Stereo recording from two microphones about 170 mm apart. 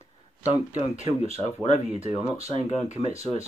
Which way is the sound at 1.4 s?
45° left (ahead or behind).